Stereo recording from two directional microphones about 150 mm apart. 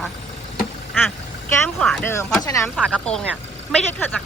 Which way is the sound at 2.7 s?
5° left (ahead or behind).